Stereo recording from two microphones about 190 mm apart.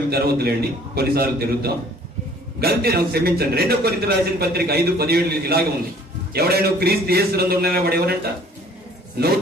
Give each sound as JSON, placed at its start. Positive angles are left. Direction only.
{"t": 0.1, "sound": "a man's voice", "side_deg": -55}